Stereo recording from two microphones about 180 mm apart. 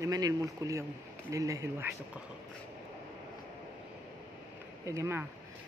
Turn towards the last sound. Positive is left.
turn(degrees=-15)  # may be behind; listen again after turning